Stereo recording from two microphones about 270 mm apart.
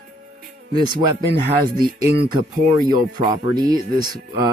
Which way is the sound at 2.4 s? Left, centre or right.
Right.